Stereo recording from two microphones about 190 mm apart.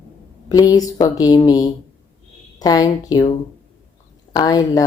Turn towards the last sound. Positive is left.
turn(degrees=20)  # may be behind; listen again after turning